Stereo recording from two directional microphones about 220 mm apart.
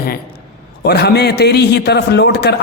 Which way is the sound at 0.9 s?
50° left (ahead or behind).